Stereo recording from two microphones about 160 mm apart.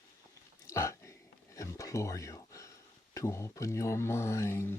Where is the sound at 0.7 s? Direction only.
20° left (ahead or behind).